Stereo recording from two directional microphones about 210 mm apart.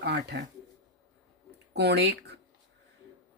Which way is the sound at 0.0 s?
50° right (ahead or behind).